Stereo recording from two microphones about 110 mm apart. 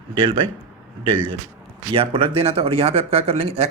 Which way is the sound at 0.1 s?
50° right (ahead or behind).